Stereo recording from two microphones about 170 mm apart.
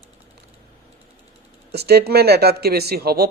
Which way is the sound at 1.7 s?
70° right (ahead or behind).